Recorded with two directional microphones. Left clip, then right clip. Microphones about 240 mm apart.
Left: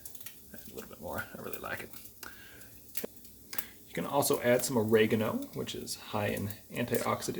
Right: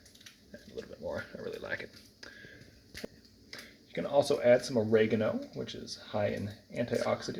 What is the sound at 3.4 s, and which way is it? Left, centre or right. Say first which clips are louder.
Speech: left 3 dB; left.